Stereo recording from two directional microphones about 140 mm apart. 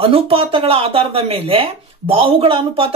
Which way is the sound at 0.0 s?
40° right (ahead or behind).